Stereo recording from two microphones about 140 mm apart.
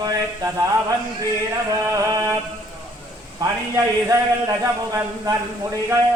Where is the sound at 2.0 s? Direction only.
25° right (ahead or behind).